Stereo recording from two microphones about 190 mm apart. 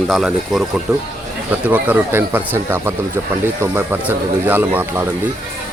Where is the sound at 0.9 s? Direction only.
15° right (ahead or behind).